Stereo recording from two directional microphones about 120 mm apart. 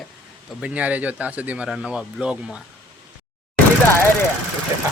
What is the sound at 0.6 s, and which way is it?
Speech, 10° right (ahead or behind).